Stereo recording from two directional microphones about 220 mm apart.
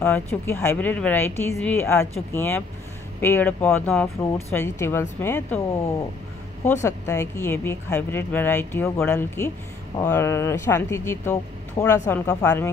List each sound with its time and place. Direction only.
0.0 s speech: 10° left (ahead or behind)